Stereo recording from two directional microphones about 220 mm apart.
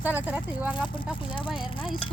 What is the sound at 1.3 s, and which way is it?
Speech, 20° left (ahead or behind).